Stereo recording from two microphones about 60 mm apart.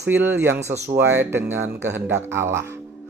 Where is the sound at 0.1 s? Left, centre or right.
Right.